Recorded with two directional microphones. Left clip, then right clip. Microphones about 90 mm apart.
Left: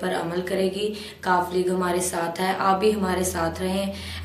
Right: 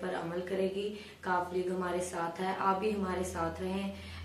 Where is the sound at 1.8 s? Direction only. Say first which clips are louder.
Left 10 dB; 35° left (ahead or behind).